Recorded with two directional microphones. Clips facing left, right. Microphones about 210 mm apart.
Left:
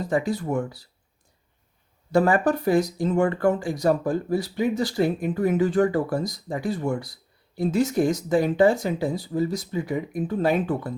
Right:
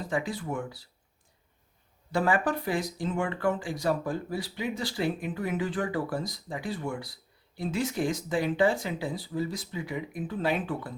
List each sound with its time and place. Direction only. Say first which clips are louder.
0.0 s speech: left 7 dB; 40° left (ahead or behind)
2.1 s speech: left 7 dB; 45° left (ahead or behind)